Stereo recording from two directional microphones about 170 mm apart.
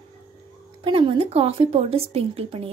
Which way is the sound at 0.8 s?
30° right (ahead or behind).